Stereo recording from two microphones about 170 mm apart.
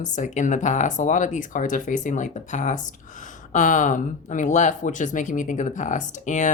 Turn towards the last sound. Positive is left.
turn(degrees=45)  # may be behind; listen again after turning